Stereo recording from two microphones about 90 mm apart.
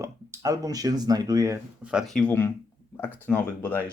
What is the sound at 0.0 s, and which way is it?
Speech, 40° right (ahead or behind).